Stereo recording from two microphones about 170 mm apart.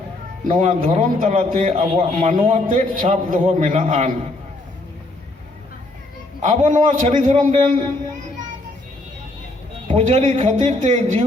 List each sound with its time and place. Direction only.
0.4 s a man's voice: 50° right (ahead or behind)
0.9 s a man's voice: 40° right (ahead or behind)
6.4 s a man's voice: 45° right (ahead or behind)
9.9 s a man's voice: 40° right (ahead or behind)